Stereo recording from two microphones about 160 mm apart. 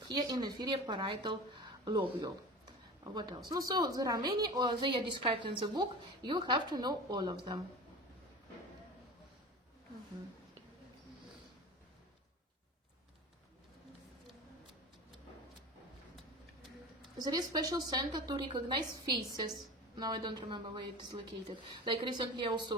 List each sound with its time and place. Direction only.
0.1 s a woman's voice: 25° right (ahead or behind)
17.2 s a woman's voice: 25° right (ahead or behind)